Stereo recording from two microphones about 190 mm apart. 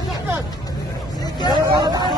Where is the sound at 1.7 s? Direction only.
20° right (ahead or behind).